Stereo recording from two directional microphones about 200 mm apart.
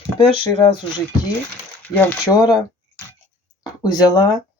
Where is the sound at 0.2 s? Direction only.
25° left (ahead or behind).